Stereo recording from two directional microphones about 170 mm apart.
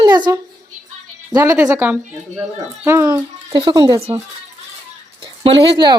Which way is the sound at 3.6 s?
25° right (ahead or behind).